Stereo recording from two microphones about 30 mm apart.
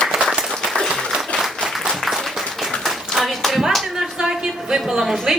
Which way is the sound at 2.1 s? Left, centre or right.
Centre.